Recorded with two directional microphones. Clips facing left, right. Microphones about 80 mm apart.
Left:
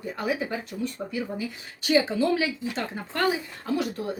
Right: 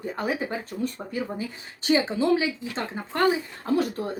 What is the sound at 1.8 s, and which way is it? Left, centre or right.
Speech, right.